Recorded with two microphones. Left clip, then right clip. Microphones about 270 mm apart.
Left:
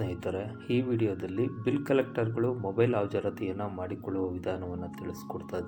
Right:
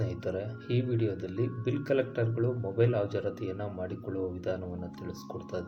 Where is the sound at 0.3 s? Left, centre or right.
Centre.